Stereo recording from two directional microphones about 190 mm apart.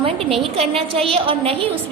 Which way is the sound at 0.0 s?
30° right (ahead or behind).